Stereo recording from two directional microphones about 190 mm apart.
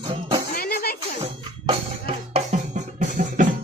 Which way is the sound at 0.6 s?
55° left (ahead or behind).